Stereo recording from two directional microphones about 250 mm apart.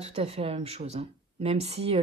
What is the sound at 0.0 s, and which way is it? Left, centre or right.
Speech, right.